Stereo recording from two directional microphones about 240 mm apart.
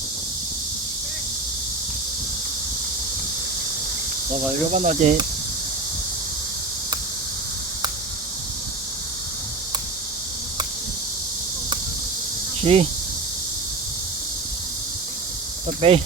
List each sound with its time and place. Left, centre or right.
4.7 s speech: right
12.6 s speech: right
15.8 s speech: right